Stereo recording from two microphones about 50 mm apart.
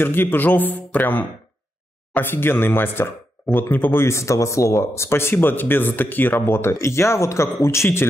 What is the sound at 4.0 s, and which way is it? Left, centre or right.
Speech, left.